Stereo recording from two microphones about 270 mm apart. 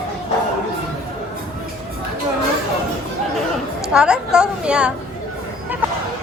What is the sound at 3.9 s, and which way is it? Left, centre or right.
A woman's voice, centre.